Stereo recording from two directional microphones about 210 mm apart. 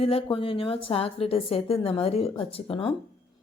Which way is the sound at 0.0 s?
25° left (ahead or behind).